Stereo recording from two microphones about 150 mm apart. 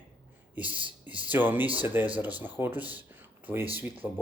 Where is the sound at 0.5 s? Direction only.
10° right (ahead or behind).